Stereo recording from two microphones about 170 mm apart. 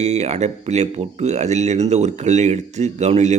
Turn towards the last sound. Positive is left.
turn(degrees=-40)  # may be behind; listen again after turning